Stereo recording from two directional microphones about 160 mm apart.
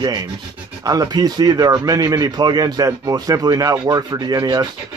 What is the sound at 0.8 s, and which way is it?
Speech, 25° right (ahead or behind).